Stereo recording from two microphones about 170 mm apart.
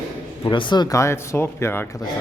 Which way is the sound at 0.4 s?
30° left (ahead or behind).